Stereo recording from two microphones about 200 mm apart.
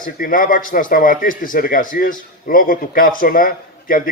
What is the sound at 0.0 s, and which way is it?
Speech, 45° left (ahead or behind).